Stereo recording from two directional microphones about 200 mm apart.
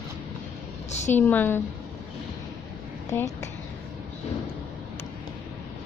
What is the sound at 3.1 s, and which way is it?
Speech, 10° left (ahead or behind).